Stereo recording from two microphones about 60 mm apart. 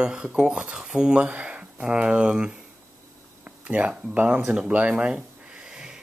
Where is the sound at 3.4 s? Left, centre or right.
Right.